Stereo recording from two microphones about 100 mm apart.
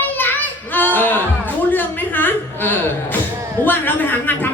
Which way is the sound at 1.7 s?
20° left (ahead or behind).